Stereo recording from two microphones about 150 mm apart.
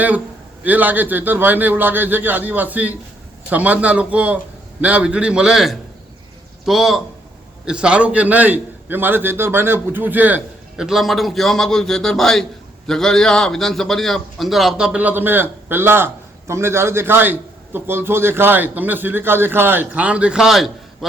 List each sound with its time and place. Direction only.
0.6 s a man's voice: 10° right (ahead or behind)